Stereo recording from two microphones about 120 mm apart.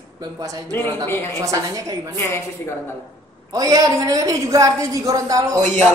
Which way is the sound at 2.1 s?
20° left (ahead or behind).